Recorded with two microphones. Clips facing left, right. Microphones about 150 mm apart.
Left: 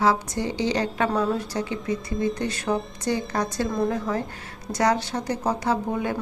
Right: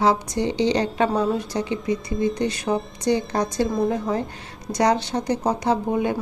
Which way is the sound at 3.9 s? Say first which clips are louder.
Right 2 dB; 25° right (ahead or behind).